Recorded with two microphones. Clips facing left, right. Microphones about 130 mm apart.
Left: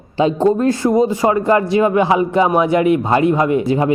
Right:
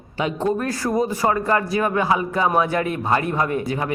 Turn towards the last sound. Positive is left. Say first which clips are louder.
# left 8 dB
turn(degrees=25)  # may be behind; listen again after turning